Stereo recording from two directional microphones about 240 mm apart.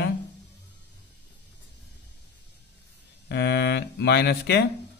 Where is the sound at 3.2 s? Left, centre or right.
Left.